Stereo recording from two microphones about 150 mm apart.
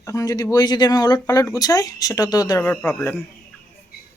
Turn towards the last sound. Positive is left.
turn(degrees=5)  # may be behind; listen again after turning